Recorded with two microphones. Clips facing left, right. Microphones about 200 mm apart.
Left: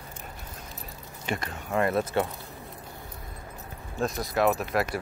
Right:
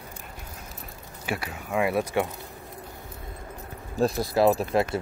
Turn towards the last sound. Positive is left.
turn(degrees=-30)  # may be behind; listen again after turning